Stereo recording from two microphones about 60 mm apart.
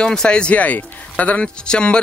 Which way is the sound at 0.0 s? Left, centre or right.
Centre.